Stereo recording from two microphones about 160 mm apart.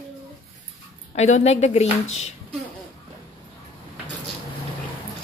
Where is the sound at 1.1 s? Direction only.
45° left (ahead or behind).